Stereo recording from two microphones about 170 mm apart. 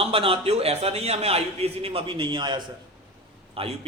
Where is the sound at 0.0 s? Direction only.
35° right (ahead or behind).